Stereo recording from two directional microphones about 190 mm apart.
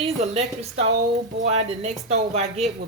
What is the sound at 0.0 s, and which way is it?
A woman's voice, 35° right (ahead or behind).